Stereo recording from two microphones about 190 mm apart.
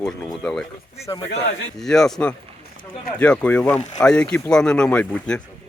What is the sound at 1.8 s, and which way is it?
A man's voice, 5° left (ahead or behind).